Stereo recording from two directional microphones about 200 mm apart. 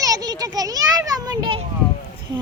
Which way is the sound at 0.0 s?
20° right (ahead or behind).